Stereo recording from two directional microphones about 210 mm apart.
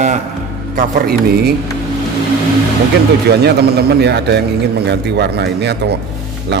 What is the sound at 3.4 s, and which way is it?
A man's voice, 50° right (ahead or behind).